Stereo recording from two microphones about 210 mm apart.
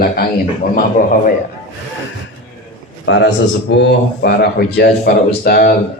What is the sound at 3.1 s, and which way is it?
A man's voice, 60° left (ahead or behind).